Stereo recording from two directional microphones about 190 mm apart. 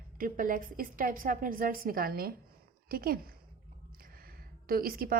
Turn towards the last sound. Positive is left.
turn(degrees=-50)  # may be behind; listen again after turning